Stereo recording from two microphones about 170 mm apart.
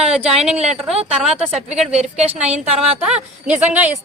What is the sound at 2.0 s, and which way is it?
Speech, 40° right (ahead or behind).